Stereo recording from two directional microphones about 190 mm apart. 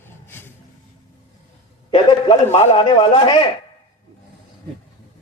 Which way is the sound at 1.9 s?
30° left (ahead or behind).